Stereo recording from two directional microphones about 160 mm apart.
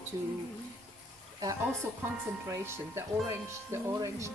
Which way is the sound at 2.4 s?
15° right (ahead or behind).